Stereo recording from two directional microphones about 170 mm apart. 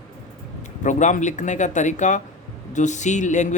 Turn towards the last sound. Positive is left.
turn(degrees=45)  # may be behind; listen again after turning